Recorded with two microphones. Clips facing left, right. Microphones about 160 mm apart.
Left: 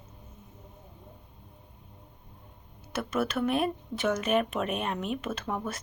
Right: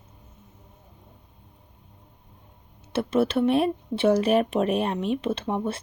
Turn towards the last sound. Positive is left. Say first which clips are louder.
# right 6 dB
turn(degrees=-30)  # may be behind; listen again after turning